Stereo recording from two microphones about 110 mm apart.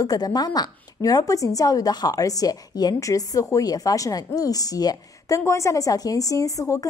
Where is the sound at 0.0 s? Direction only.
35° left (ahead or behind).